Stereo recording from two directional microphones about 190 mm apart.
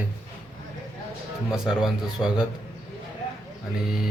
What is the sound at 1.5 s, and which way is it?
Speech, 5° right (ahead or behind).